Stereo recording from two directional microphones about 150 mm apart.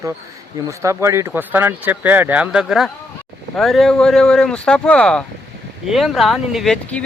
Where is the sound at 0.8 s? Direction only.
20° right (ahead or behind); by 6.7 s centre (ahead or behind).